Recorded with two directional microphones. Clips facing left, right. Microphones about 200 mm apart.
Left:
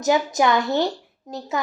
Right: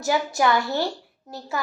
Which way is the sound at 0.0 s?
20° left (ahead or behind).